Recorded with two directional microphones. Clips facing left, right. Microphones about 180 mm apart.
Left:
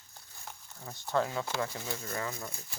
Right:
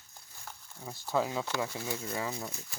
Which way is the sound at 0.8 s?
5° right (ahead or behind).